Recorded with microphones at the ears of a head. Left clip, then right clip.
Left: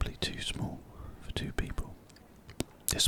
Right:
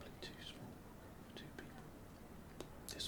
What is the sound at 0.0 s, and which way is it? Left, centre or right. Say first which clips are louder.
Whispering: left 16 dB; left.